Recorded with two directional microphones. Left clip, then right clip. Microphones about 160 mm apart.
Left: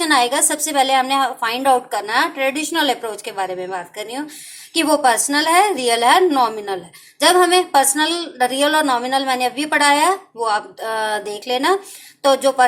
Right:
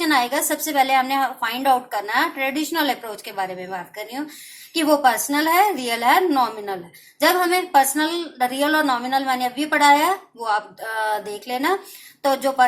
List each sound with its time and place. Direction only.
0.0 s a woman's voice: 30° left (ahead or behind)